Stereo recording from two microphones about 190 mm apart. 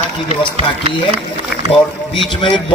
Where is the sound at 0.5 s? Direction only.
30° right (ahead or behind).